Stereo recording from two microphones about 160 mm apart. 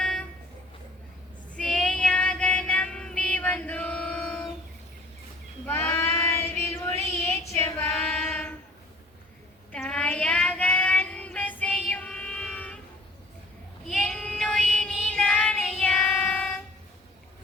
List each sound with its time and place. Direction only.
0.0 s a sound: 5° left (ahead or behind)
1.5 s child singing: 5° left (ahead or behind)
5.6 s child singing: 15° left (ahead or behind)
9.7 s child singing: 5° left (ahead or behind)
13.8 s child singing: 5° left (ahead or behind)